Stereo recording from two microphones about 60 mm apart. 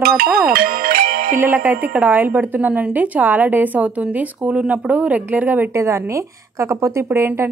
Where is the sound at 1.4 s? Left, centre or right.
Right.